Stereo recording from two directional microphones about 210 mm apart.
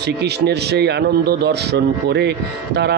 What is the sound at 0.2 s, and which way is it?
Speech, 50° right (ahead or behind).